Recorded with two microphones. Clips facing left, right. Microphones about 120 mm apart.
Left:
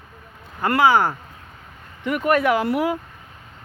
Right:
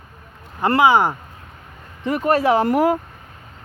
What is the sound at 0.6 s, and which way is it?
Speech, 20° right (ahead or behind).